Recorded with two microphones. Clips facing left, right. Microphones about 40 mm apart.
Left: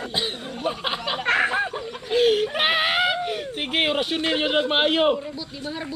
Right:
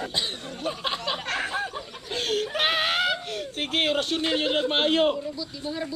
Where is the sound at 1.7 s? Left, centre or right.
Centre.